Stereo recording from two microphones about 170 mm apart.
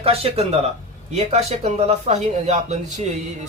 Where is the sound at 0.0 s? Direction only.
35° right (ahead or behind).